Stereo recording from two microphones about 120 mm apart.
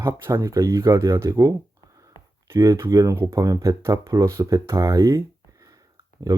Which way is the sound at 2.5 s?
25° right (ahead or behind).